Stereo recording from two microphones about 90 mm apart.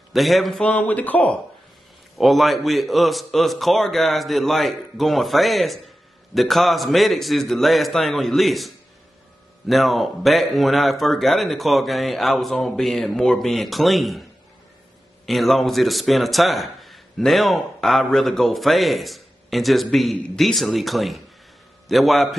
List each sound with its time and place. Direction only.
0.1 s a man's voice: centre (ahead or behind)
0.7 s speech: 15° left (ahead or behind)
2.1 s a man's voice: centre (ahead or behind)
15.2 s a man's voice: centre (ahead or behind)